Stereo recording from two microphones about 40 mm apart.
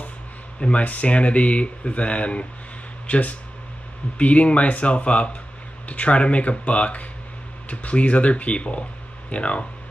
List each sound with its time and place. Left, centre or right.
0.6 s speech: left